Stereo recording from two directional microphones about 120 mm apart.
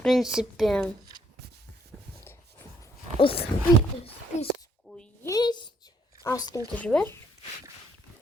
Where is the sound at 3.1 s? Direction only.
50° left (ahead or behind).